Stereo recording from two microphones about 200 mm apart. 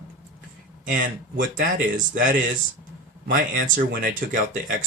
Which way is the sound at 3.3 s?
45° right (ahead or behind).